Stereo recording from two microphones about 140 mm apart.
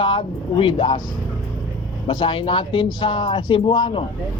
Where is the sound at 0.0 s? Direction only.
35° left (ahead or behind).